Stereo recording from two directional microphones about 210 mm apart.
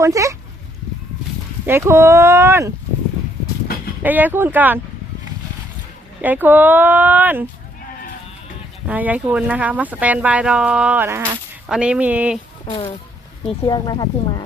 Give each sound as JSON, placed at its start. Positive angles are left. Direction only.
{"t": 0.0, "sound": "speech", "side_deg": -15}
{"t": 1.6, "sound": "speech", "side_deg": -10}
{"t": 4.0, "sound": "speech", "side_deg": -10}
{"t": 6.2, "sound": "speech", "side_deg": -10}
{"t": 8.9, "sound": "speech", "side_deg": -5}
{"t": 12.6, "sound": "speech", "side_deg": 30}